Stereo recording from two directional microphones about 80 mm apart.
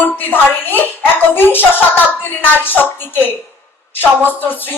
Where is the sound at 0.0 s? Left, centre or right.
Left.